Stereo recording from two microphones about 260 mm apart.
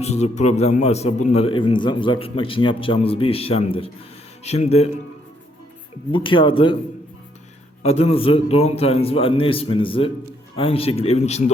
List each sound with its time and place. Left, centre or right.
0.0 s a man's voice: left
6.1 s a man's voice: centre
7.8 s a man's voice: left